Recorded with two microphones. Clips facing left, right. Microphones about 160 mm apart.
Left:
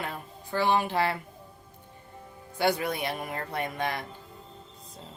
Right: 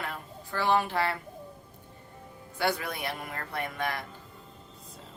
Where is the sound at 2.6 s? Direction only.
15° left (ahead or behind).